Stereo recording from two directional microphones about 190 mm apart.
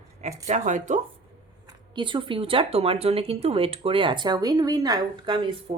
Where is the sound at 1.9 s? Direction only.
25° right (ahead or behind).